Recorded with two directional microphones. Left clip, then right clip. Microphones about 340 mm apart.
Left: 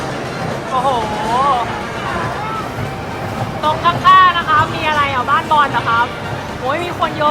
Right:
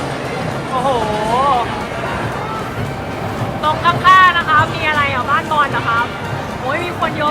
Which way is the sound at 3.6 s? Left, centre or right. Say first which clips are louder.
Even; centre.